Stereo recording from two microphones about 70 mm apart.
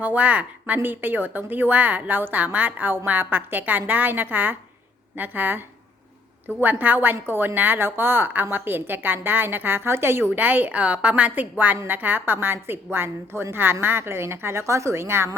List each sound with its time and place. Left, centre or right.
0.0 s a woman's voice: right